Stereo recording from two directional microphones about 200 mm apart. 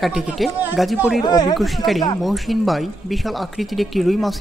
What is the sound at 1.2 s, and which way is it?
Speech, 20° left (ahead or behind).